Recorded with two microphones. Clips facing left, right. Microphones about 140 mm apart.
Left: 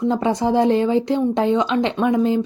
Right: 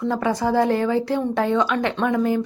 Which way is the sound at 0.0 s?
20° left (ahead or behind).